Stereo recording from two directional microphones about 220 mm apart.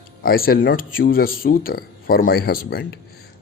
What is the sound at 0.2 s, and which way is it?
Speech, 40° left (ahead or behind).